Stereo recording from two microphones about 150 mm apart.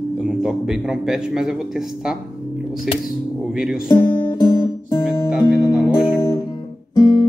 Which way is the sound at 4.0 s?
35° left (ahead or behind).